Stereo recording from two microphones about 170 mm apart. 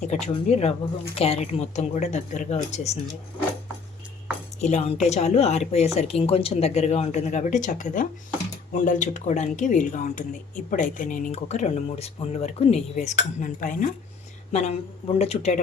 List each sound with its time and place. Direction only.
0.4 s a woman's voice: 40° left (ahead or behind)
4.6 s a woman's voice: 40° left (ahead or behind)
11.3 s a woman's voice: 40° left (ahead or behind)
14.5 s a woman's voice: 40° left (ahead or behind)